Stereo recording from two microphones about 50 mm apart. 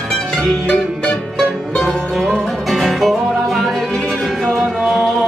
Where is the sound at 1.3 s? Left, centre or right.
Centre.